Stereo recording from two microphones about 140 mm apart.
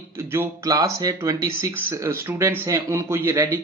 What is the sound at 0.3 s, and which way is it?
Speech, 20° right (ahead or behind).